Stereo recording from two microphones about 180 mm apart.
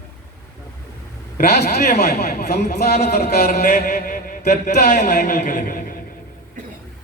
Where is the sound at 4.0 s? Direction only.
50° left (ahead or behind).